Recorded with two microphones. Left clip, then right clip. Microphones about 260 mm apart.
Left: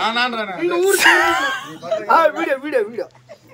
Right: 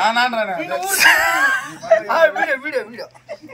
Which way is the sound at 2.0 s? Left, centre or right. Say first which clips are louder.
Left 6 dB; centre.